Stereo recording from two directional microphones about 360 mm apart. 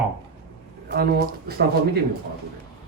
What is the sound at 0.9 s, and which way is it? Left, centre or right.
Speech, right.